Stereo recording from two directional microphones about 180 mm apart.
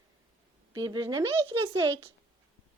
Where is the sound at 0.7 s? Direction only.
25° right (ahead or behind).